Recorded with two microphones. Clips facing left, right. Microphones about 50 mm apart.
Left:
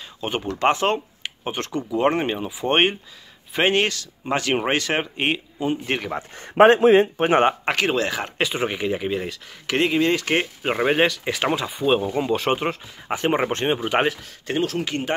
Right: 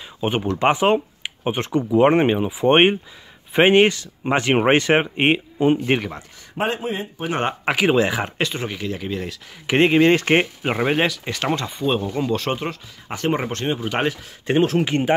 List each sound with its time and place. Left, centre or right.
0.2 s speech: centre
6.5 s speech: left
7.6 s speech: centre
8.5 s speech: left
9.8 s speech: right
10.6 s speech: centre; by 13.7 s left
13.7 s speech: centre
14.4 s speech: right